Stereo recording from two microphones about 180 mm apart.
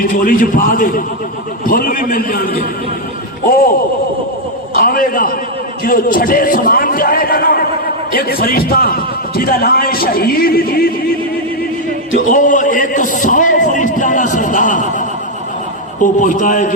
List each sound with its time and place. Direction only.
0.0 s a man's voice: 50° left (ahead or behind)
12.3 s a sound: 45° left (ahead or behind)
16.2 s a man's voice: 45° left (ahead or behind)